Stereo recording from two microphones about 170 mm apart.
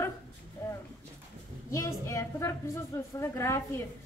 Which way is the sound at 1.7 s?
15° left (ahead or behind).